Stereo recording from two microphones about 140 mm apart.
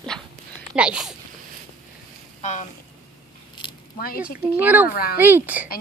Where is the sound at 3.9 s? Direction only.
90° left.